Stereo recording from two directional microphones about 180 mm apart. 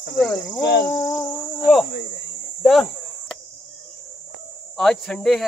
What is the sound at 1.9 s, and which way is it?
Cricket, 65° left (ahead or behind).